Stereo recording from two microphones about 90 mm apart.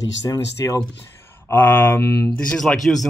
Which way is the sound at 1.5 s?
20° left (ahead or behind).